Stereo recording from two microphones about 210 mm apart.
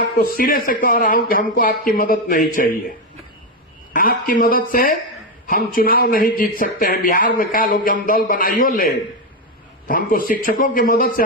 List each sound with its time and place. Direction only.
0.2 s a man's voice: 45° left (ahead or behind)
3.9 s speech: 40° left (ahead or behind)